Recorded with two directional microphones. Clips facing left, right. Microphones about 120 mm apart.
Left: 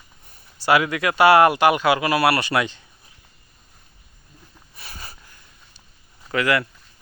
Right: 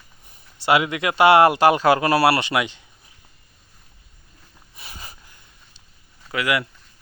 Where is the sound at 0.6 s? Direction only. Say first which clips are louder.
Even; 25° right (ahead or behind).